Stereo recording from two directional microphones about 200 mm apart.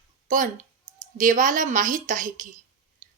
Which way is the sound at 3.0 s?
40° right (ahead or behind).